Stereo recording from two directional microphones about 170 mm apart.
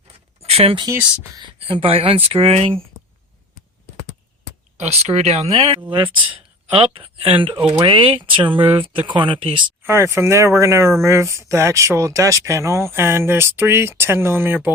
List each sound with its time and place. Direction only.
0.4 s speech: 35° right (ahead or behind)
4.8 s speech: 40° right (ahead or behind)
9.8 s speech: 15° right (ahead or behind)